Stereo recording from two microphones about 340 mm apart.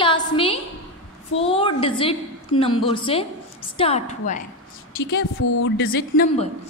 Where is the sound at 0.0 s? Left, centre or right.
Centre.